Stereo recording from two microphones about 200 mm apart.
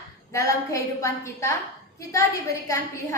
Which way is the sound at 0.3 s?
15° left (ahead or behind).